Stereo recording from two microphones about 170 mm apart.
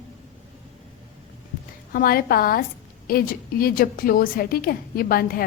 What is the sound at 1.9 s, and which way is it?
A woman's voice, 60° left (ahead or behind).